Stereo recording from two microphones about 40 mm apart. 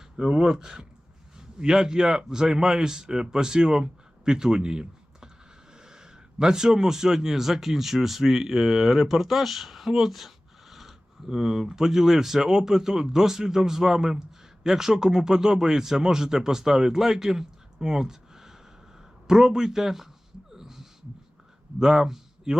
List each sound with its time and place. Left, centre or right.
0.2 s a man's voice: centre
20.5 s a sound: centre
21.8 s speech: centre